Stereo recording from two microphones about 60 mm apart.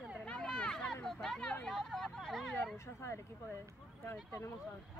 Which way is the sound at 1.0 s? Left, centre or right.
Centre.